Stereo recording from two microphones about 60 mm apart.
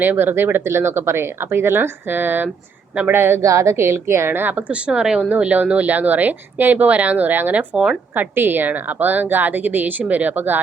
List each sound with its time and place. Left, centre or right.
0.0 s a woman's voice: right
3.4 s a woman's voice: right
4.7 s speech: centre
5.3 s speech: right
8.1 s a woman's voice: right